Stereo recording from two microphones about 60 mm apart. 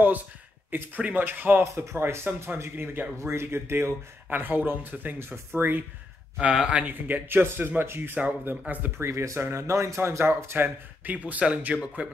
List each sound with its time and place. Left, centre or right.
0.7 s speech: right
1.6 s speech: right
4.3 s speech: right
6.4 s speech: centre
6.9 s speech: right
8.9 s speech: right
11.1 s speech: right